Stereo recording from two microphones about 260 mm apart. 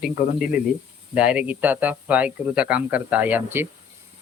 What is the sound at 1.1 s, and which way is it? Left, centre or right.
Speech, centre.